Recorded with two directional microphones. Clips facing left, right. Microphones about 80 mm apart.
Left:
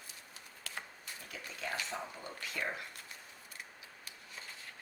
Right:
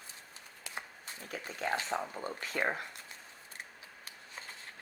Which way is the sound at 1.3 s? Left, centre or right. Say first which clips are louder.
Right 7 dB; right.